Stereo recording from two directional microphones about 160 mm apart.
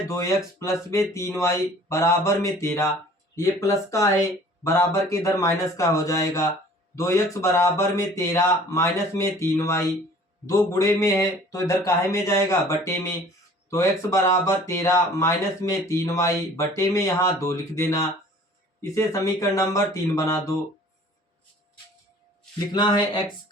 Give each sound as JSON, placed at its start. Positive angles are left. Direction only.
{"t": 0.1, "sound": "speech", "side_deg": 20}
{"t": 22.7, "sound": "speech", "side_deg": 25}